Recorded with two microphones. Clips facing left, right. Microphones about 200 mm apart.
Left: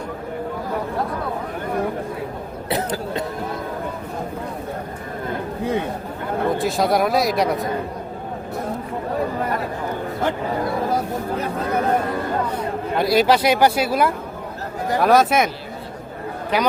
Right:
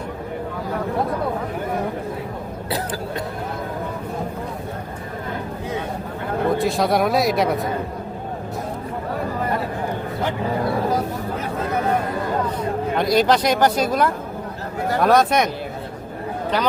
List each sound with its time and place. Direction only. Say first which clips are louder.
2.6 s cough: left 3 dB; 20° left (ahead or behind)
6.6 s speech: left 1 dB; centre (ahead or behind)
13.0 s speech: left 1 dB; 5° left (ahead or behind)
16.5 s speech: left 2 dB; 10° left (ahead or behind)